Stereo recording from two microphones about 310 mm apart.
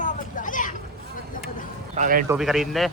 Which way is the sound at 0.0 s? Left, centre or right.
Left.